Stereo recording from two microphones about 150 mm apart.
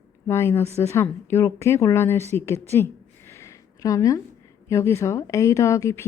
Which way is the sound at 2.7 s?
15° left (ahead or behind).